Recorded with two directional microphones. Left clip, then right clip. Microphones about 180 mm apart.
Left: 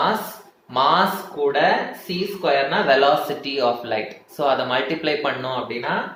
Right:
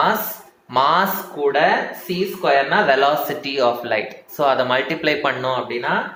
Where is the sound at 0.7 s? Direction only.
20° right (ahead or behind).